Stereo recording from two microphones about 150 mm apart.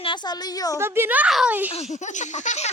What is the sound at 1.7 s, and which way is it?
Speech, 50° left (ahead or behind).